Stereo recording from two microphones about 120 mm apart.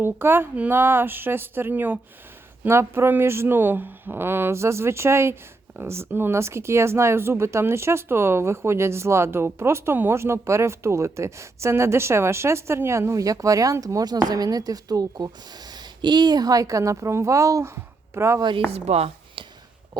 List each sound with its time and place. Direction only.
0.0 s speech: 20° right (ahead or behind)
18.7 s speech: 60° right (ahead or behind)